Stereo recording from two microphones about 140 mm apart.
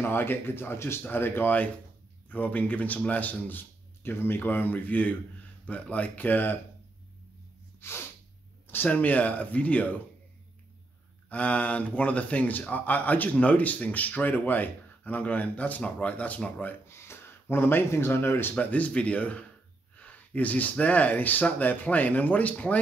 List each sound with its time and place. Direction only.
0.0 s speech: 15° left (ahead or behind)
8.6 s speech: 10° left (ahead or behind)
11.2 s speech: 10° left (ahead or behind)